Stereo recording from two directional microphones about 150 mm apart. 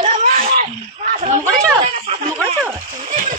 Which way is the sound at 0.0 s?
45° right (ahead or behind).